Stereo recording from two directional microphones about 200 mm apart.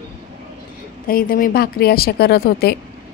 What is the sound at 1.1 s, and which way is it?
A woman's voice, 45° left (ahead or behind).